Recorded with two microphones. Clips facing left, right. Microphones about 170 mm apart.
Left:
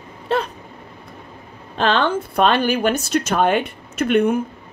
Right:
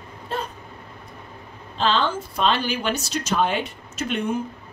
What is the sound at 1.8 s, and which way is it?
Speech, 60° left (ahead or behind).